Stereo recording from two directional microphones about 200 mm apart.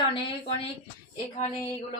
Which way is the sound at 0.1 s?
30° left (ahead or behind).